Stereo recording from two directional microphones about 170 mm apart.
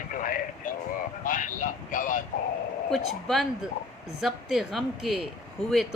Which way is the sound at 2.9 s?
Centre (ahead or behind).